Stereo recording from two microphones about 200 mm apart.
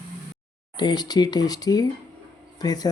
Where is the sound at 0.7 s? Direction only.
20° left (ahead or behind).